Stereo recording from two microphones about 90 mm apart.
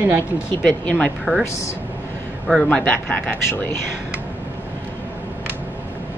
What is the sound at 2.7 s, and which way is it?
Speech, 10° left (ahead or behind).